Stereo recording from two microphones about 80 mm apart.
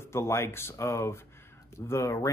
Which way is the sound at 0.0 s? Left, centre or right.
Left.